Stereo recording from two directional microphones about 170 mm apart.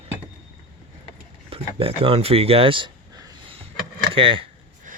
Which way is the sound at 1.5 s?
35° right (ahead or behind).